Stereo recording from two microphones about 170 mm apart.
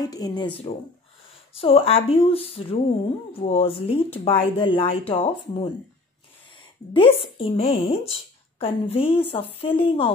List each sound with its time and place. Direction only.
0.0 s speech: 20° left (ahead or behind)